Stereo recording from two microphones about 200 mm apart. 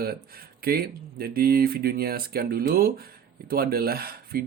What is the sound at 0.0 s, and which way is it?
Speech, 50° right (ahead or behind).